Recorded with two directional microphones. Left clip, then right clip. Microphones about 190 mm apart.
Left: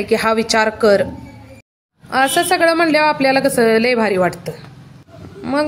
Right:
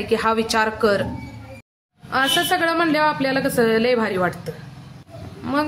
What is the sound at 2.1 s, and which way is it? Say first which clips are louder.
A woman's voice: left 4 dB; 30° left (ahead or behind).